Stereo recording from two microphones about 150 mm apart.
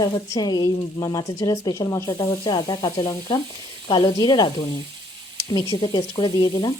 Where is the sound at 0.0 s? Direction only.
25° left (ahead or behind).